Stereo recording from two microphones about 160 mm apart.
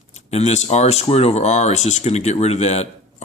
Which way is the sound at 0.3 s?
45° left (ahead or behind).